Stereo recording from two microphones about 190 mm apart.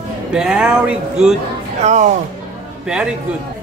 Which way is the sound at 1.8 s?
40° right (ahead or behind).